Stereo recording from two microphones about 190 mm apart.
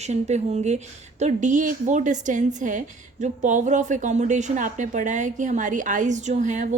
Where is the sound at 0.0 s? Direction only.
35° right (ahead or behind).